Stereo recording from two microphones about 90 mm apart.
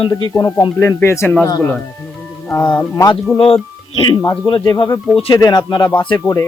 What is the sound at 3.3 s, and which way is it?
Speech, 90° left.